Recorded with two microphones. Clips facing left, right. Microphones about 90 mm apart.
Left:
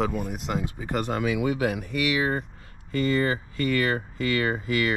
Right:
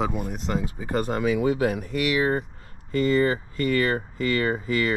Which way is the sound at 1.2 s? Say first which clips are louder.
Right 4 dB; 35° right (ahead or behind).